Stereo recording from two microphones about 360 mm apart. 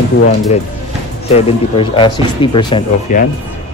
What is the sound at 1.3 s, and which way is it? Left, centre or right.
Speech, centre.